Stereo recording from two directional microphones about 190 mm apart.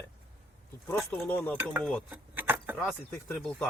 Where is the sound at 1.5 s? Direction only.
10° right (ahead or behind).